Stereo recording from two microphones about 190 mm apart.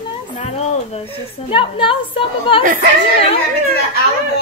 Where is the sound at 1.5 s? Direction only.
25° left (ahead or behind).